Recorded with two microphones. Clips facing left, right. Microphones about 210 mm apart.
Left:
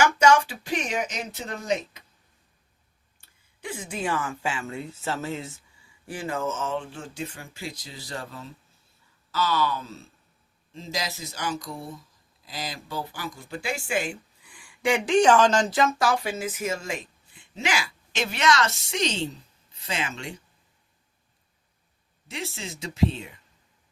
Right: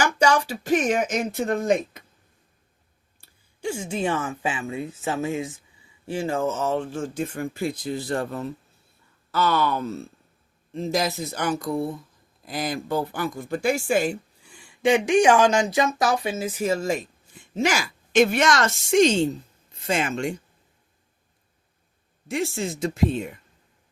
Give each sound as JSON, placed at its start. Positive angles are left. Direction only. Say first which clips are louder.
{"t": 0.0, "sound": "speech", "louder": "left 1 dB", "side_deg": -35}
{"t": 3.6, "sound": "speech", "louder": "right 6 dB", "side_deg": -30}
{"t": 6.1, "sound": "speech", "louder": "right 5 dB", "side_deg": -25}
{"t": 14.4, "sound": "speech", "louder": "right 4 dB", "side_deg": -25}
{"t": 22.3, "sound": "speech", "louder": "right 9 dB", "side_deg": -50}